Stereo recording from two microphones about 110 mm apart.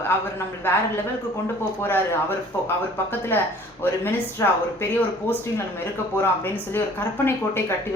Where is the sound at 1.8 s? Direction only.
20° left (ahead or behind).